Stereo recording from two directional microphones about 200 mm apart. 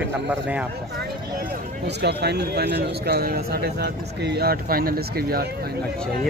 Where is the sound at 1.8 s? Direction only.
55° right (ahead or behind).